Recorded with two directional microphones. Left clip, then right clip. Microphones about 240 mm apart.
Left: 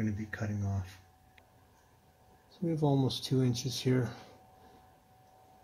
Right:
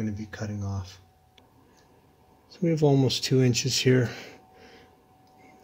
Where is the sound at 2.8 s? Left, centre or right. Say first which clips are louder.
Right 8 dB; right.